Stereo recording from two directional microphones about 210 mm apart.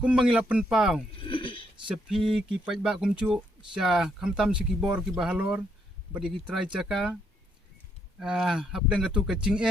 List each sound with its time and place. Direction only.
0.0 s speech: 5° right (ahead or behind)
1.2 s a sound: 25° left (ahead or behind)
2.0 s speech: centre (ahead or behind)
8.2 s speech: 5° right (ahead or behind)